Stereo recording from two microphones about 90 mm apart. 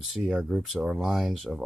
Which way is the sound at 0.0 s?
Centre (ahead or behind).